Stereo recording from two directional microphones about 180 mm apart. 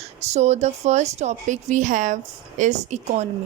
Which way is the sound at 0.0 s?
40° right (ahead or behind).